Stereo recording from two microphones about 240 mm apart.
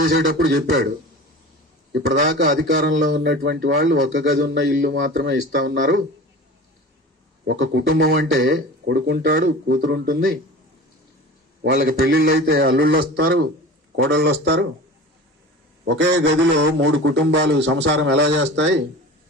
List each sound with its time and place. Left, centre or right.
0.0 s speech: right
0.4 s a man's voice: right
1.9 s a man's voice: right
7.4 s a man's voice: right
11.6 s a man's voice: right
15.9 s a man's voice: right